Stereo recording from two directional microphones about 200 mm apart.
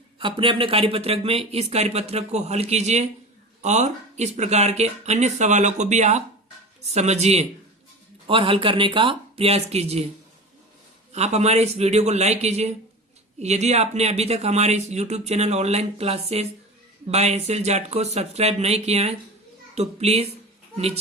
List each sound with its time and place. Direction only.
0.2 s speech: 25° right (ahead or behind)
11.1 s speech: 35° right (ahead or behind)